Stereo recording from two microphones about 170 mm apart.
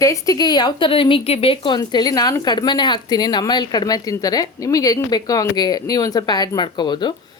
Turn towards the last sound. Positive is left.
turn(degrees=25)  # may be behind; listen again after turning